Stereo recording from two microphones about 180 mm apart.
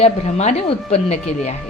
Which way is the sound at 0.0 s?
40° left (ahead or behind).